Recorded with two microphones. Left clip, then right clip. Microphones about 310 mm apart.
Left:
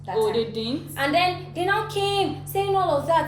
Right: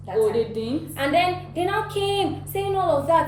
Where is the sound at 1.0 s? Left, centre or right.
Centre.